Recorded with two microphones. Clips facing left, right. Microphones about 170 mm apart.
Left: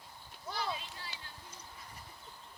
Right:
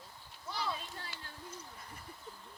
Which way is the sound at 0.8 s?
50° right (ahead or behind).